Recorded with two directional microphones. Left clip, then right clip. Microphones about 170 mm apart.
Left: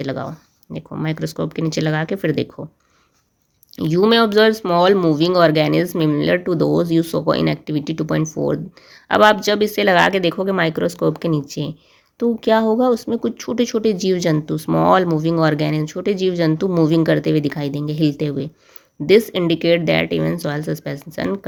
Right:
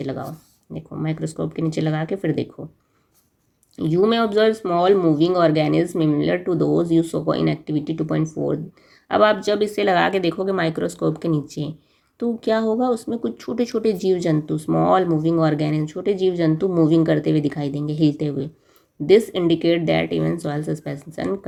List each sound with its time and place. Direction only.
0.0 s speech: 25° left (ahead or behind)
3.8 s speech: 25° left (ahead or behind)